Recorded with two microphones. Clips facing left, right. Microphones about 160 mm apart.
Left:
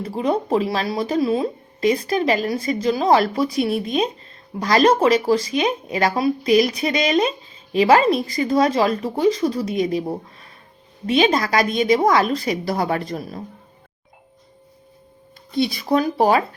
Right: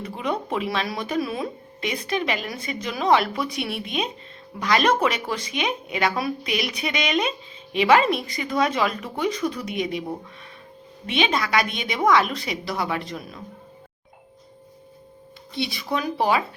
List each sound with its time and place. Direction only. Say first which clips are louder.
0.0 s speech: left 6 dB; 35° left (ahead or behind)
15.5 s speech: left 8 dB; 45° left (ahead or behind)